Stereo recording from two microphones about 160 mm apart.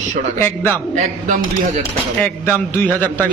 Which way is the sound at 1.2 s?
50° right (ahead or behind).